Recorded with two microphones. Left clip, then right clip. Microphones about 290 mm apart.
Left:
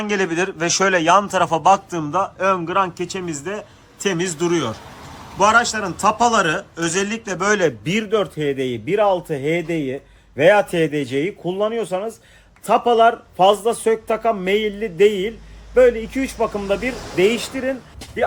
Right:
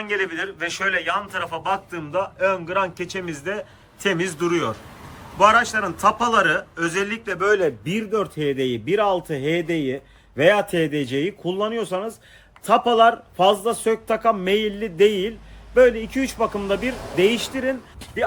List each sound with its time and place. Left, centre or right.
0.0 s a man's voice: centre
7.4 s a man's voice: left
8.1 s speech: centre